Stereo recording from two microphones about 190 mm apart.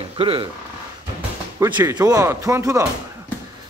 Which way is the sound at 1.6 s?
15° right (ahead or behind).